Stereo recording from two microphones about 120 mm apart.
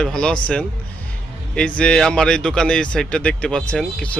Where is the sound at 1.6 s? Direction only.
10° left (ahead or behind).